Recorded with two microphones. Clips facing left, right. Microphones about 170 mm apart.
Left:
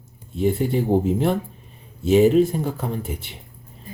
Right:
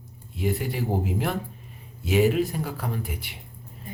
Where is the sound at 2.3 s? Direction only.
25° left (ahead or behind).